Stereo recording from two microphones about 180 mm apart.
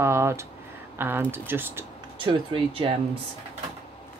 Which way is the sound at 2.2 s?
30° right (ahead or behind).